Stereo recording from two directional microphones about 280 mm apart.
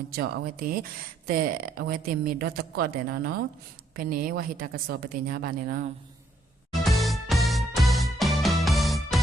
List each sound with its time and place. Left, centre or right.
0.1 s speech: right
6.7 s music: centre